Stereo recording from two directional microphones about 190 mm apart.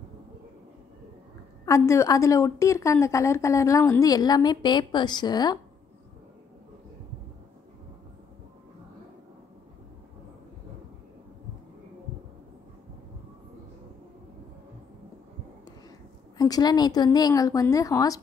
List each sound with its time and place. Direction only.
1.7 s a woman's voice: 15° left (ahead or behind)
16.3 s a woman's voice: 20° left (ahead or behind)